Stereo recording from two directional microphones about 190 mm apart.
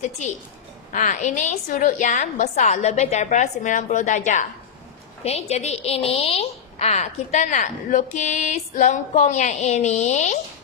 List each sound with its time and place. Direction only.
0.9 s a woman's voice: 40° left (ahead or behind)